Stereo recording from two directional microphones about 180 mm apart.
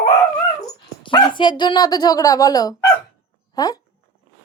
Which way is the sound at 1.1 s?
25° left (ahead or behind).